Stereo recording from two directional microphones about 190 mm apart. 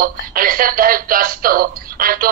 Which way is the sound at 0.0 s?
50° right (ahead or behind).